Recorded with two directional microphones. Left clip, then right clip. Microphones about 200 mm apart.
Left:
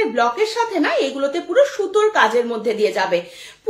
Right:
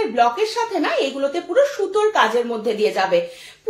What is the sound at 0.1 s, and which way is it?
A woman's voice, 25° left (ahead or behind).